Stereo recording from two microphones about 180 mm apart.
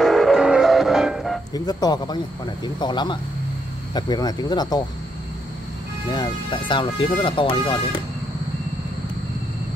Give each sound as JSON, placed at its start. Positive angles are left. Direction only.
{"t": 0.0, "sound": "music", "side_deg": 0}
{"t": 1.5, "sound": "speech", "side_deg": 20}
{"t": 6.0, "sound": "speech", "side_deg": 25}